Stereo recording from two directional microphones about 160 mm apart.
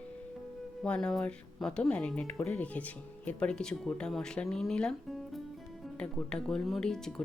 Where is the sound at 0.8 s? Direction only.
5° left (ahead or behind).